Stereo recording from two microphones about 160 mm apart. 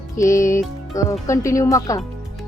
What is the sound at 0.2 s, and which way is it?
Speech, 20° left (ahead or behind).